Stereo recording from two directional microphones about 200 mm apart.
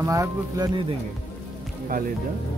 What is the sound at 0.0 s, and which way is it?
Speech, 15° right (ahead or behind).